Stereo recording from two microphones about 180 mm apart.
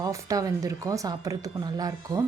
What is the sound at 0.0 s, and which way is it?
A woman's voice, 20° right (ahead or behind).